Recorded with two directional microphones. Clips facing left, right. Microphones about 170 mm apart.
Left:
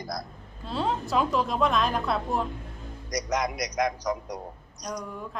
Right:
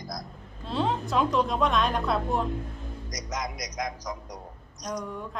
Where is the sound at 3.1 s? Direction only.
65° left (ahead or behind).